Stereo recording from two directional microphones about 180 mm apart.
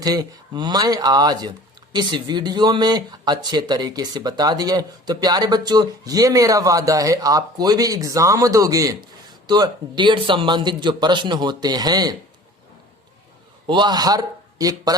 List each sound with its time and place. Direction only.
0.0 s speech: 20° right (ahead or behind)
13.7 s a man's voice: 25° right (ahead or behind)